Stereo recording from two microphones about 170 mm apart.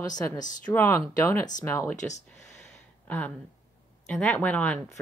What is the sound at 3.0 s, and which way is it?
A woman's voice, 10° left (ahead or behind).